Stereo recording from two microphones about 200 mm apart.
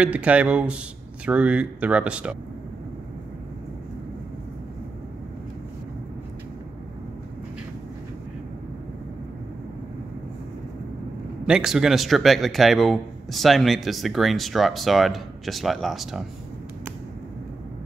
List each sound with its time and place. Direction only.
0.0 s a man's voice: 5° right (ahead or behind)
11.4 s a man's voice: 5° right (ahead or behind)